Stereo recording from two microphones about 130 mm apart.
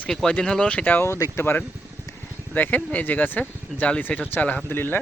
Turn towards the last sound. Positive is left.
turn(degrees=15)  # may be behind; listen again after turning